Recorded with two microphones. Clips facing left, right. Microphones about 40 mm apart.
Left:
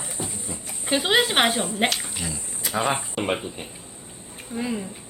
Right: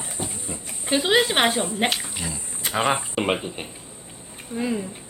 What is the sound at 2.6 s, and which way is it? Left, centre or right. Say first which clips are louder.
Speech: right 2 dB; right.